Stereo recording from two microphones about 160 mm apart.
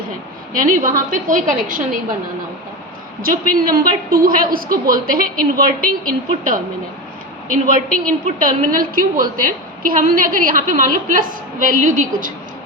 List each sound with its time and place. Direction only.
0.5 s a woman's voice: 55° right (ahead or behind)
3.2 s a woman's voice: 60° right (ahead or behind)